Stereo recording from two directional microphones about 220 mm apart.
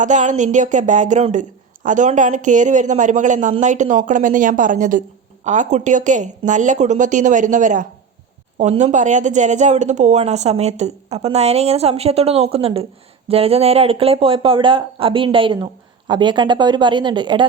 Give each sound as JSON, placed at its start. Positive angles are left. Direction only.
{"t": 0.0, "sound": "a woman's voice", "side_deg": -35}